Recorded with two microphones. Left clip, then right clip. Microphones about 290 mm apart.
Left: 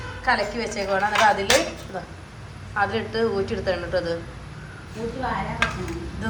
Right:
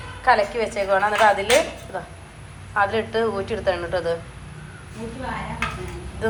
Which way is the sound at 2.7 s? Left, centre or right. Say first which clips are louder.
Right 3 dB; centre.